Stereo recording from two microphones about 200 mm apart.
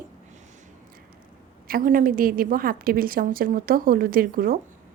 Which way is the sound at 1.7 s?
40° right (ahead or behind).